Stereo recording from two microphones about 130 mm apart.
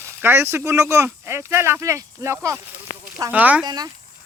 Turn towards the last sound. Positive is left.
turn(degrees=-30)  # may be behind; listen again after turning